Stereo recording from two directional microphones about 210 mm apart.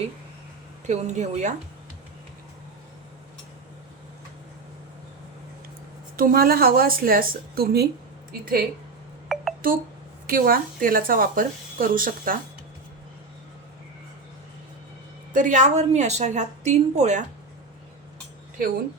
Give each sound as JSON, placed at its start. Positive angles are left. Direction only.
{"t": 0.9, "sound": "a woman's voice", "side_deg": -35}
{"t": 6.1, "sound": "speech", "side_deg": -45}
{"t": 9.3, "sound": "a sound", "side_deg": 0}
{"t": 10.2, "sound": "speech", "side_deg": -45}
{"t": 15.3, "sound": "a woman's voice", "side_deg": -40}